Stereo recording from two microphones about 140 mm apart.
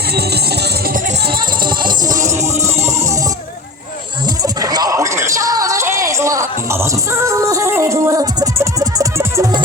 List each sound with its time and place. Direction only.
1.8 s music: 30° right (ahead or behind)
4.4 s music: 25° right (ahead or behind)